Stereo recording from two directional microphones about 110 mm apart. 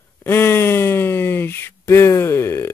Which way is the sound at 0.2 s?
20° left (ahead or behind).